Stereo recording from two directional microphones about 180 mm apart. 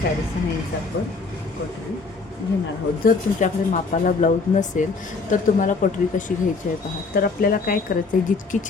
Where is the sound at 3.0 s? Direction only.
45° left (ahead or behind).